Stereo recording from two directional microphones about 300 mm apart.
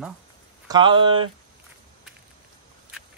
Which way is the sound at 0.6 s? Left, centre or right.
Centre.